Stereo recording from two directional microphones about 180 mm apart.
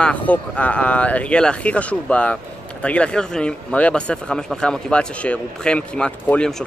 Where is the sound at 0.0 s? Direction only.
5° left (ahead or behind).